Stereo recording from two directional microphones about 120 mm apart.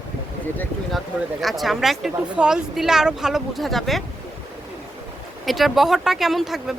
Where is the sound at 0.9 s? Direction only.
Centre (ahead or behind).